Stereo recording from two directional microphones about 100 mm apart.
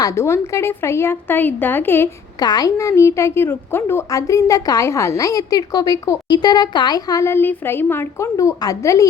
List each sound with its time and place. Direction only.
0.0 s a woman's voice: 30° left (ahead or behind)
2.4 s a woman's voice: 40° left (ahead or behind)
7.3 s a woman's voice: 20° left (ahead or behind)